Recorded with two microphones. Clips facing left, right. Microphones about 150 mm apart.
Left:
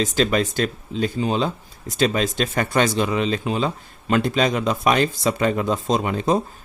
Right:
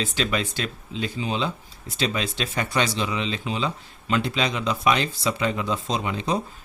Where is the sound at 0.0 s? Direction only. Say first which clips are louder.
Left 6 dB; 40° left (ahead or behind).